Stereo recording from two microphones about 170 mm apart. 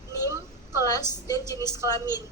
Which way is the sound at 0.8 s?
20° left (ahead or behind).